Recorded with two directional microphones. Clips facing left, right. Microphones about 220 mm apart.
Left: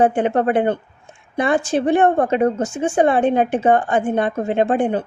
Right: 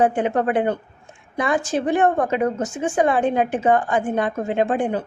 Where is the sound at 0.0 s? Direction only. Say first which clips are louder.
Left 3 dB; 30° left (ahead or behind).